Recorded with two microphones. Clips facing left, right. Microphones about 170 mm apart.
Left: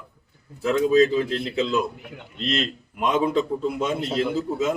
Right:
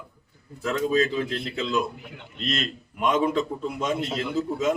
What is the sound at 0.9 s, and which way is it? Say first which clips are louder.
Speech: left 7 dB; 35° left (ahead or behind).